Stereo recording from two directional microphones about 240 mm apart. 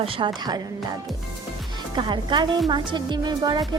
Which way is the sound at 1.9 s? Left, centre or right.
Centre.